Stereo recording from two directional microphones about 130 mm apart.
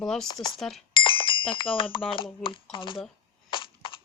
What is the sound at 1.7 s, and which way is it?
Speech, 40° left (ahead or behind).